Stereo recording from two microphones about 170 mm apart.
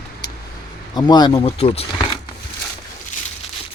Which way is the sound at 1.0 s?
25° left (ahead or behind).